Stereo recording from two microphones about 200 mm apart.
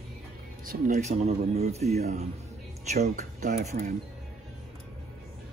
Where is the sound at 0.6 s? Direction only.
40° right (ahead or behind).